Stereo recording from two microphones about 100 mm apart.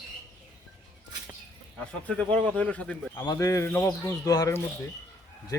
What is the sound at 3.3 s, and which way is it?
Speech, 30° left (ahead or behind).